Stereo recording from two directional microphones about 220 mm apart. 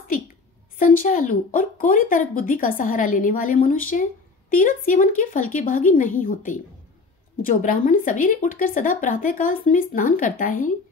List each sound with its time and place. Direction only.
0.7 s speech: 35° left (ahead or behind)